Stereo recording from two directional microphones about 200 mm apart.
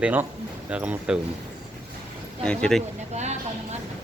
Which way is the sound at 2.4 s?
5° left (ahead or behind).